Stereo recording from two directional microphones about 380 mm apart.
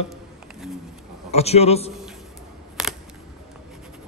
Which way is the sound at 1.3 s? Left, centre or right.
Centre.